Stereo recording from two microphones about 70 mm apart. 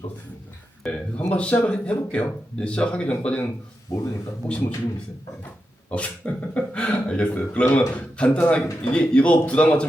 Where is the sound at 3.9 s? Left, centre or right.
Left.